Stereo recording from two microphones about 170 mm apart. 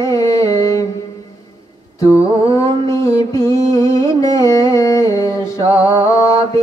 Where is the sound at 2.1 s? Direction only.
20° left (ahead or behind).